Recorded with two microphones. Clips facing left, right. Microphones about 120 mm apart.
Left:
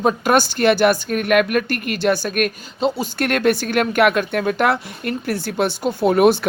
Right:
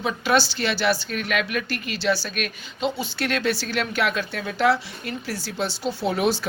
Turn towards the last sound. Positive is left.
turn(degrees=55)  # may be behind; listen again after turning